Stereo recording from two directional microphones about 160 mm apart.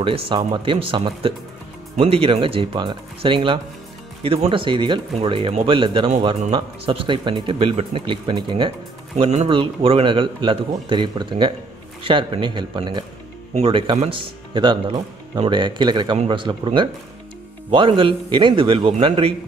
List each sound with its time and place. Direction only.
0.0 s speech: 35° right (ahead or behind)
9.1 s speech: 45° right (ahead or behind)